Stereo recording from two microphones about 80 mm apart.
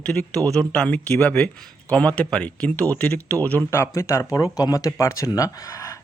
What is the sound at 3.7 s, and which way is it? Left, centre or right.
Speech, left.